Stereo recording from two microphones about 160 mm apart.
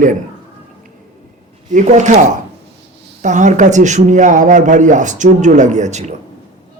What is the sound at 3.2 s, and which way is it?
Speech, 50° right (ahead or behind).